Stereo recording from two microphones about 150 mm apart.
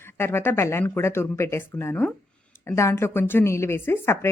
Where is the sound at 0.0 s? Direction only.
15° left (ahead or behind).